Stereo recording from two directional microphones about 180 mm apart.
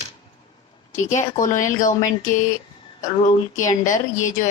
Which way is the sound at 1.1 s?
45° left (ahead or behind).